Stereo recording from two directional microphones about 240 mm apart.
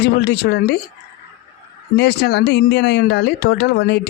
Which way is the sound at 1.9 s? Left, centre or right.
Left.